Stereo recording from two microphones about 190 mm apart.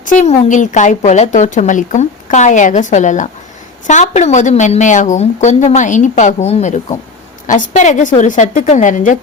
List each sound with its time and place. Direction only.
0.0 s a woman's voice: 40° left (ahead or behind)